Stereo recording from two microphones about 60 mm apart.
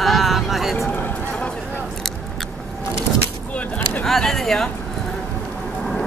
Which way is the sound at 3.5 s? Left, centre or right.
Left.